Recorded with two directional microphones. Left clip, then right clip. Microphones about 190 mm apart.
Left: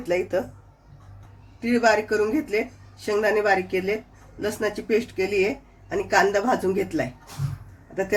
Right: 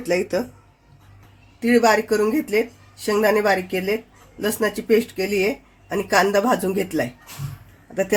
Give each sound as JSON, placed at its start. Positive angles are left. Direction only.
{"t": 0.1, "sound": "speech", "side_deg": -40}
{"t": 1.6, "sound": "speech", "side_deg": -50}